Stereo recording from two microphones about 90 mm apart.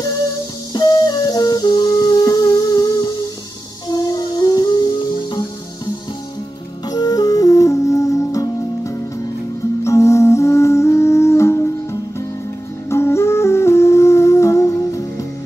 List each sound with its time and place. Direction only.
0.7 s music: 50° left (ahead or behind)
6.9 s music: 45° left (ahead or behind)